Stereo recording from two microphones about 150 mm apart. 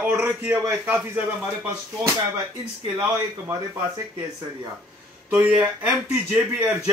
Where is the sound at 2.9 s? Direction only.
15° right (ahead or behind).